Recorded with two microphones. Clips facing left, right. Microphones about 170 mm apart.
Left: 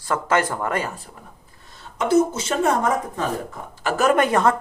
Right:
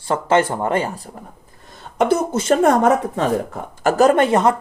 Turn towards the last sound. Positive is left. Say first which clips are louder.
# right 3 dB
turn(degrees=-20)  # may be behind; listen again after turning